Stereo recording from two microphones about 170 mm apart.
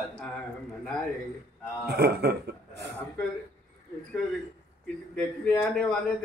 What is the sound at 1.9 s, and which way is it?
A man's voice, 70° right (ahead or behind).